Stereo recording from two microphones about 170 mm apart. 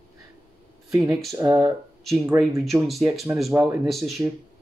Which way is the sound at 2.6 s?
Centre (ahead or behind).